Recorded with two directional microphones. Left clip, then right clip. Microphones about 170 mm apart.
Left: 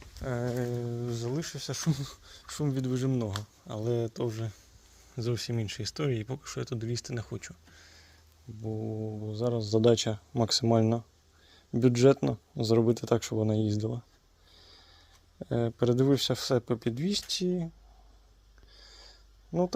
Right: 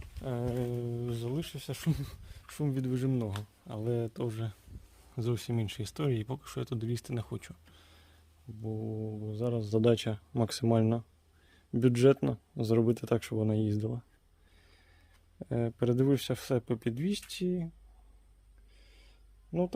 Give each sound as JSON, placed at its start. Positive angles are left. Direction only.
{"t": 0.2, "sound": "speech", "side_deg": -10}
{"t": 0.7, "sound": "speech", "side_deg": 0}
{"t": 15.4, "sound": "speech", "side_deg": -5}
{"t": 19.5, "sound": "speech", "side_deg": -10}